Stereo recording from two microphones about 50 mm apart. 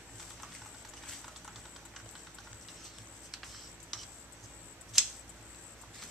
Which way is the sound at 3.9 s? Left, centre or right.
Centre.